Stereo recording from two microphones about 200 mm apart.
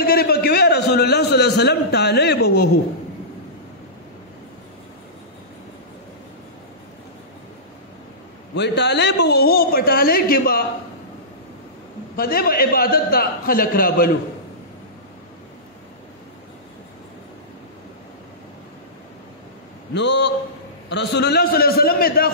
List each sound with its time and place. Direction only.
0.0 s a sound: 50° left (ahead or behind)
8.5 s a man's voice: 60° left (ahead or behind)
12.2 s a man's voice: 50° left (ahead or behind)
19.9 s a man's voice: 60° left (ahead or behind)